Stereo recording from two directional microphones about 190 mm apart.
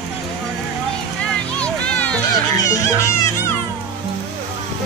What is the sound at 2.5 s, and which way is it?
Speech, 15° left (ahead or behind).